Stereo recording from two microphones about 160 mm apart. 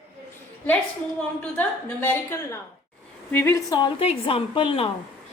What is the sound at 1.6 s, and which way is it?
A woman's voice, 10° left (ahead or behind).